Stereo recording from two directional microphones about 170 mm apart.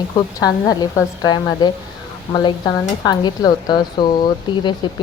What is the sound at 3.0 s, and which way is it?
Speech, 25° left (ahead or behind).